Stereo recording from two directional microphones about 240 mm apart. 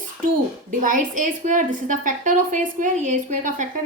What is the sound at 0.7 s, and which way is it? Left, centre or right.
A woman's voice, right.